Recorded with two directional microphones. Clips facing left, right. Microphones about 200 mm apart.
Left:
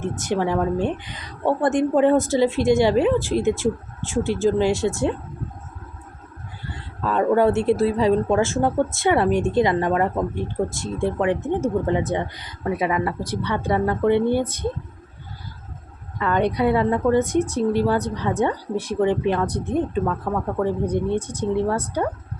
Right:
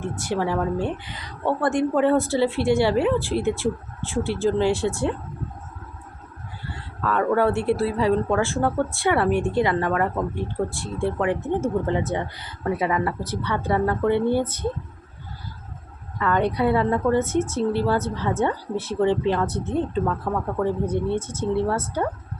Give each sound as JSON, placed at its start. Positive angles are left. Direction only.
{"t": 0.0, "sound": "speech", "side_deg": 20}
{"t": 7.0, "sound": "speech", "side_deg": 20}
{"t": 16.1, "sound": "speech", "side_deg": 20}